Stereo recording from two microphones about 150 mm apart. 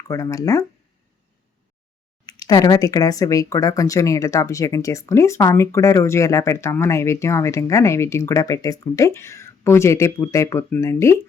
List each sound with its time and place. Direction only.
0.1 s speech: 20° left (ahead or behind)
2.2 s speech: 25° left (ahead or behind)